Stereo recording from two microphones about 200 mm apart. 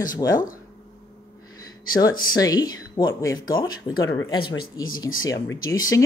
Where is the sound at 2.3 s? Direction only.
20° left (ahead or behind).